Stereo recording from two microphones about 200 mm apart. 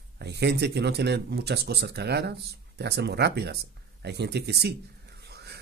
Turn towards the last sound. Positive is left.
turn(degrees=-55)  # may be behind; listen again after turning